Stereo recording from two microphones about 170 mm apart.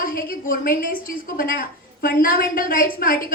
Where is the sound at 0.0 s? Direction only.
60° left (ahead or behind).